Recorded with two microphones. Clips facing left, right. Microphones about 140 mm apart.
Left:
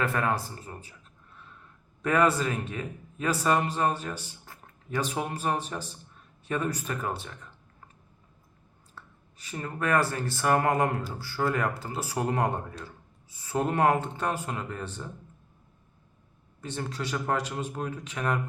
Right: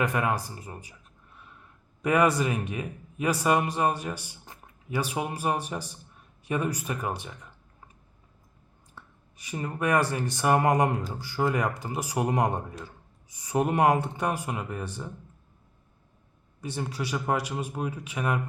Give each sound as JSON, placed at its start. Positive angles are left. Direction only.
{"t": 0.0, "sound": "a man's voice", "side_deg": -15}
{"t": 2.0, "sound": "a man's voice", "side_deg": -10}
{"t": 9.0, "sound": "a man's voice", "side_deg": -15}
{"t": 16.6, "sound": "a man's voice", "side_deg": -10}